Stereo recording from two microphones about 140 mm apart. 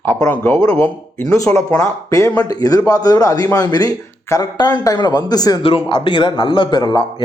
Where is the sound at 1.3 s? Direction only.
20° left (ahead or behind).